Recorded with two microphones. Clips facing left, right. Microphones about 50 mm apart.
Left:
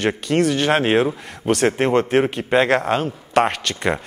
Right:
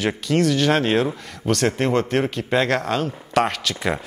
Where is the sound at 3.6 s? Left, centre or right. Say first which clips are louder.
Left 2 dB; centre.